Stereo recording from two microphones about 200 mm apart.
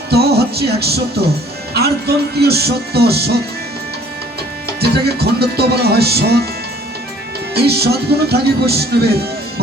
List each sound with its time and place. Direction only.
0.1 s music: 55° right (ahead or behind)
4.8 s music: 55° right (ahead or behind)
7.5 s music: 55° right (ahead or behind)